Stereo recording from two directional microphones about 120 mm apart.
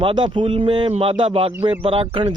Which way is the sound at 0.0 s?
40° right (ahead or behind).